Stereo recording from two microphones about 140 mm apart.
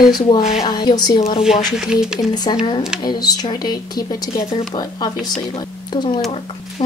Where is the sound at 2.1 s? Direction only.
30° left (ahead or behind).